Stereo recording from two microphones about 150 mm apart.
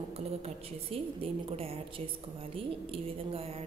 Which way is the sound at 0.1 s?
40° right (ahead or behind).